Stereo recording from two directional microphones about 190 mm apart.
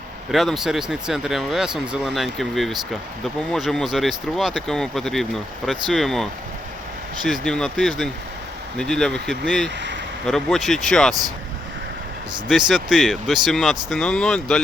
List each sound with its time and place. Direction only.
0.3 s speech: centre (ahead or behind)
7.3 s speech: 5° left (ahead or behind)
9.6 s speech: 70° right (ahead or behind)
10.2 s speech: centre (ahead or behind)
12.5 s speech: 5° right (ahead or behind)